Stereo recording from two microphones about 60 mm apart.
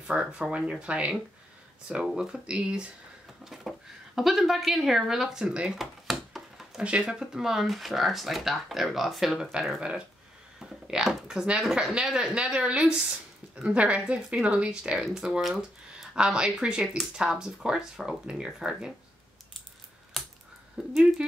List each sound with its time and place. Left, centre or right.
0.0 s speech: centre
5.7 s a sound: centre
6.8 s speech: centre
16.2 s speech: centre
16.8 s speech: centre
17.2 s speech: centre
20.2 s a sound: centre
20.8 s speech: centre